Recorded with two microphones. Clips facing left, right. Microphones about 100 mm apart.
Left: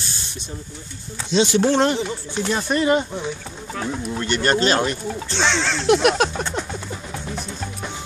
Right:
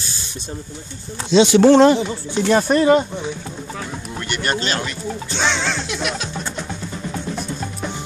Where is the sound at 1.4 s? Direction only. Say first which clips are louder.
Right 7 dB; 90° right.